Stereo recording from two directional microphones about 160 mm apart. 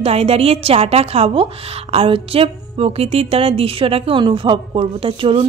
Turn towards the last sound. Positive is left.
turn(degrees=-35)  # may be behind; listen again after turning